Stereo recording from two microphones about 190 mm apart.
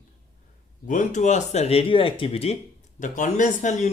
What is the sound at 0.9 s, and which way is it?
Speech, 40° left (ahead or behind).